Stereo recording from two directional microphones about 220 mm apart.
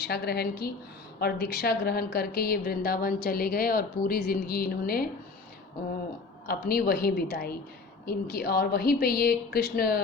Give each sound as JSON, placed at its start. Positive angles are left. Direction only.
{"t": 0.0, "sound": "a woman's voice", "side_deg": 45}
{"t": 6.5, "sound": "a woman's voice", "side_deg": 45}